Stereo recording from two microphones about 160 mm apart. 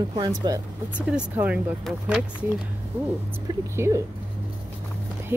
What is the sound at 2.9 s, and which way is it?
Speech, 10° right (ahead or behind).